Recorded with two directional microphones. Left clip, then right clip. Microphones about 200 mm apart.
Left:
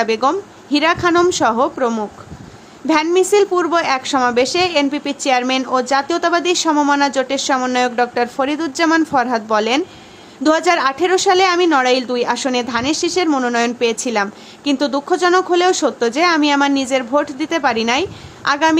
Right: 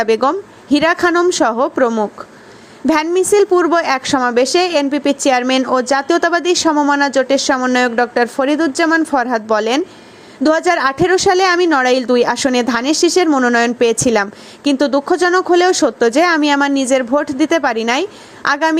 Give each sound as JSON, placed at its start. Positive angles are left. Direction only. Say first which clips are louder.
{"t": 0.0, "sound": "a woman's voice", "louder": "right 2 dB", "side_deg": -25}